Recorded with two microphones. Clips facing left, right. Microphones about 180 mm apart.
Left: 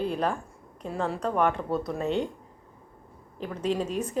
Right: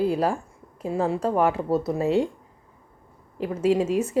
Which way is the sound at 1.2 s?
30° right (ahead or behind).